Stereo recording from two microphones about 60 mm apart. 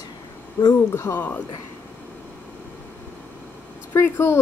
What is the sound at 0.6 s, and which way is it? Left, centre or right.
Speech, left.